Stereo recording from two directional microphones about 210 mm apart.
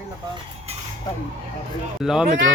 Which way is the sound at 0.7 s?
30° right (ahead or behind).